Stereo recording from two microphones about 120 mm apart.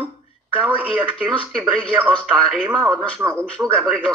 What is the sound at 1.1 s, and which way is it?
Speech, 50° left (ahead or behind).